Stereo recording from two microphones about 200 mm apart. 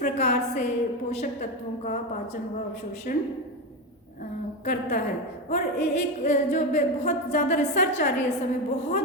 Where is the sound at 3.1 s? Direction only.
40° left (ahead or behind).